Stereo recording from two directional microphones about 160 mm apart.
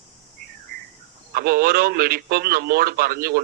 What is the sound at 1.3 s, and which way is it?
A man's voice, 70° right (ahead or behind).